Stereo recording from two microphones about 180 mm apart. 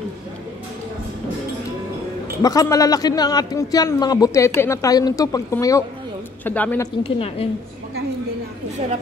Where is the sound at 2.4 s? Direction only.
20° left (ahead or behind).